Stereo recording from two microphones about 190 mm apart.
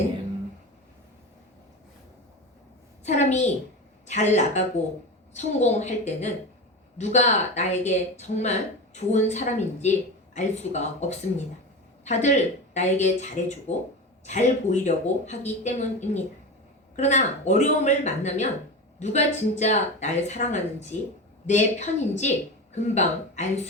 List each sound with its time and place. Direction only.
3.0 s a woman's voice: 35° left (ahead or behind)